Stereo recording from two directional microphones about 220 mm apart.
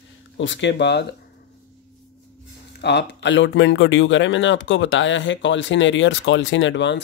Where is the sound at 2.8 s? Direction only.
50° left (ahead or behind).